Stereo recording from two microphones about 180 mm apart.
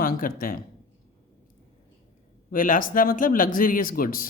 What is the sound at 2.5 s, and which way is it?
A woman's voice, 50° left (ahead or behind).